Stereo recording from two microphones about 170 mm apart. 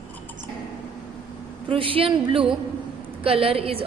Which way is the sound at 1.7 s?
30° right (ahead or behind).